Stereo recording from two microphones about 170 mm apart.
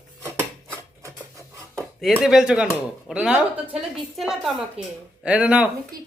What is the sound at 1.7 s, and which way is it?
Speech, centre (ahead or behind).